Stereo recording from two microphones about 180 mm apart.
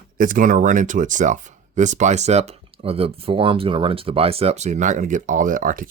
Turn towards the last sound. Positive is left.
turn(degrees=-50)  # may be behind; listen again after turning